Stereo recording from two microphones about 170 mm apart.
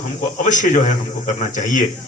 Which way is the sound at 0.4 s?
45° left (ahead or behind).